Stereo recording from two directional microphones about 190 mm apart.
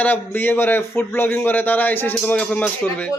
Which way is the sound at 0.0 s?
10° left (ahead or behind).